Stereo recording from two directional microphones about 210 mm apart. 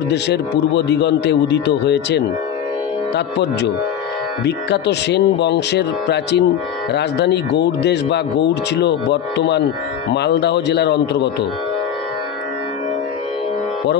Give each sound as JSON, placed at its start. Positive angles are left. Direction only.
{"t": 0.1, "sound": "speech", "side_deg": 55}
{"t": 4.5, "sound": "speech", "side_deg": 55}